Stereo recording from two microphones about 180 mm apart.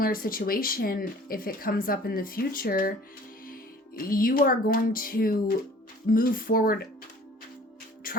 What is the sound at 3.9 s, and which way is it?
A woman's voice, 50° left (ahead or behind).